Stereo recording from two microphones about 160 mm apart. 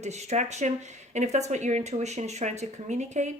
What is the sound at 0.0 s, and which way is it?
Speech, 45° right (ahead or behind).